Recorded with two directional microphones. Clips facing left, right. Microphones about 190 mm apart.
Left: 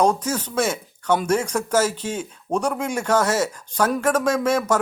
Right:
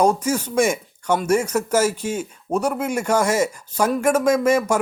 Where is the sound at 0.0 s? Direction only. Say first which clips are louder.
Right 2 dB; 10° right (ahead or behind).